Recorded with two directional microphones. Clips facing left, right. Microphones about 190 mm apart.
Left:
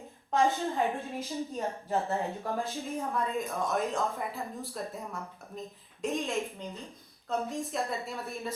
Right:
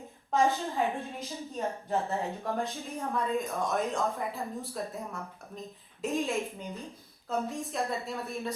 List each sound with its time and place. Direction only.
0.3 s a woman's voice: centre (ahead or behind)